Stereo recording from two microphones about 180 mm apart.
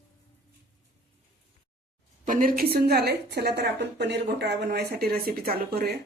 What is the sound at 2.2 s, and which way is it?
A woman's voice, 50° right (ahead or behind).